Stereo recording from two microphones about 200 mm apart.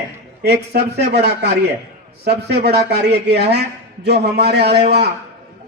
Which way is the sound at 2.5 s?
55° right (ahead or behind).